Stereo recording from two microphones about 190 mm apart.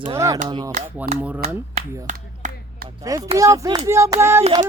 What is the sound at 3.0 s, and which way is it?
Speech, 15° right (ahead or behind).